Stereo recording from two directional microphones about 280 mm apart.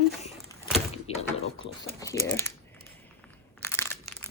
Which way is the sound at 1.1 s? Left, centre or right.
Left.